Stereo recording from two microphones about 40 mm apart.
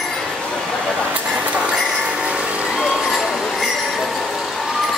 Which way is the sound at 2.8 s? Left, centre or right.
Centre.